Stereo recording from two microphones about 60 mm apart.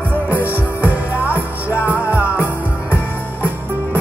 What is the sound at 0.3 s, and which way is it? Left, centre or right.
Music, left.